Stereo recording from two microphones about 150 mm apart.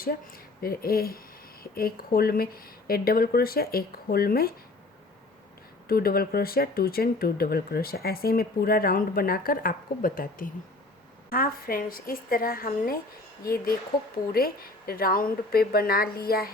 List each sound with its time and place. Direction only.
0.6 s speech: 80° left
5.9 s a woman's voice: 85° left